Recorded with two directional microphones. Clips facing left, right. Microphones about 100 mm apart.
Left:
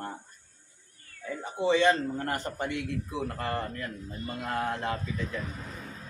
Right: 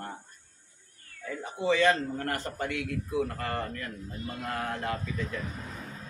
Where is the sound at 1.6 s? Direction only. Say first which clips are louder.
Left 1 dB; 25° left (ahead or behind).